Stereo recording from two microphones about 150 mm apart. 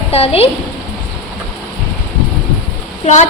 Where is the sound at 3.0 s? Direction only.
50° left (ahead or behind).